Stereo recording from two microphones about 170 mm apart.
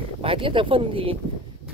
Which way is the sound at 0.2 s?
30° right (ahead or behind).